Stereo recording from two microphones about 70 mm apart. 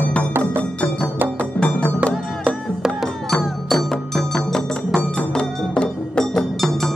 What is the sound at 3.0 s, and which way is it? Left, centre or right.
Music, centre.